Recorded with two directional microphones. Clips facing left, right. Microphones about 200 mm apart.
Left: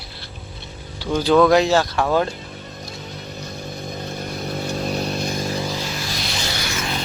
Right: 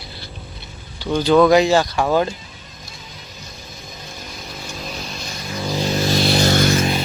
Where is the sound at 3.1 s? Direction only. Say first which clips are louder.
Left 7 dB; 60° left (ahead or behind).